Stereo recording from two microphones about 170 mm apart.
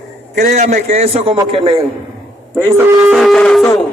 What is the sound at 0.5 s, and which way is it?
A man's voice, 45° right (ahead or behind).